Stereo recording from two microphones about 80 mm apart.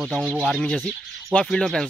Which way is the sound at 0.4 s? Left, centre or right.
Centre.